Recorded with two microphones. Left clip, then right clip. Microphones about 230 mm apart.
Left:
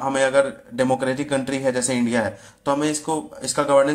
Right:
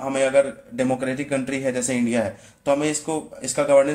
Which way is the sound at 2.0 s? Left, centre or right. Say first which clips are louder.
Left 1 dB; left.